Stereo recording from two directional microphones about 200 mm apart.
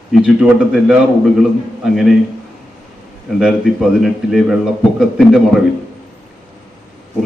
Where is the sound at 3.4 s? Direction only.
Centre (ahead or behind).